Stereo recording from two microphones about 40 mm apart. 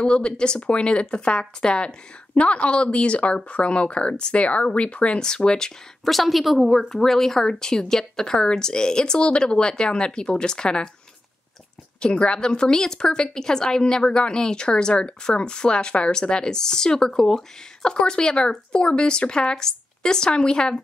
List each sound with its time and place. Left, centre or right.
0.0 s speech: left
6.0 s a woman's voice: centre
6.9 s speech: centre
12.0 s speech: left